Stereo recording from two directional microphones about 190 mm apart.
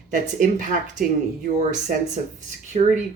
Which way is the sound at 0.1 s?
40° right (ahead or behind).